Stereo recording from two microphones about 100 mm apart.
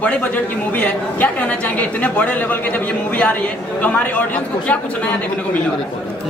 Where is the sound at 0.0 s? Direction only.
15° left (ahead or behind).